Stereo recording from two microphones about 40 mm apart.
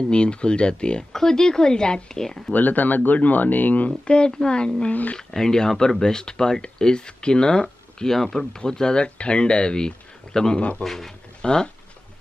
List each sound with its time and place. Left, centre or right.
0.1 s speech: left
2.5 s speech: left
4.0 s speech: left
4.8 s speech: left
5.3 s speech: centre
10.8 s speech: centre
11.4 s speech: left